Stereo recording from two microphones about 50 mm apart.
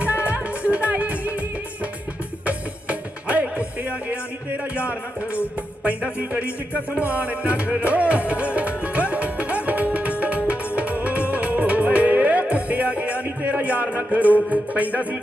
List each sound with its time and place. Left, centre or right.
0.0 s music: right
2.5 s music: right